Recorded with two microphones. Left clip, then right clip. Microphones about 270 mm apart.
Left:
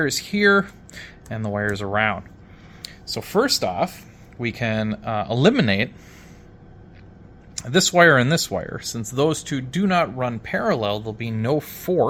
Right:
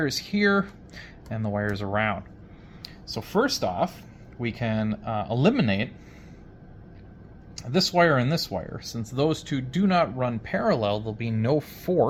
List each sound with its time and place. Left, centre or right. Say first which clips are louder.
0.0 s speech: left 6 dB; left
7.5 s speech: left 5 dB; left; by 12.0 s centre